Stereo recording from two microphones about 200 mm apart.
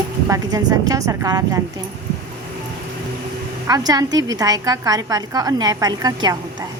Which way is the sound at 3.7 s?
20° right (ahead or behind).